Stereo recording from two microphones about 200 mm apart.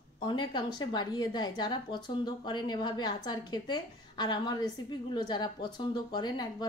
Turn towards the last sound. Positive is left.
turn(degrees=20)  # may be behind; listen again after turning